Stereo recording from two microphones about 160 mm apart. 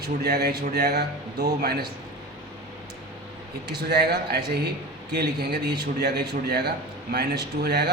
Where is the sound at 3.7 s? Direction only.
90° right.